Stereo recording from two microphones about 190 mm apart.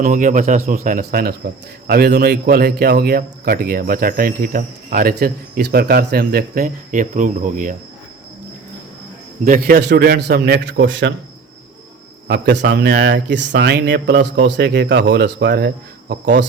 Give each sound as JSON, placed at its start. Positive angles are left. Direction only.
{"t": 0.0, "sound": "a man's voice", "side_deg": -45}
{"t": 1.9, "sound": "a man's voice", "side_deg": -60}
{"t": 9.4, "sound": "speech", "side_deg": -50}
{"t": 12.3, "sound": "speech", "side_deg": -65}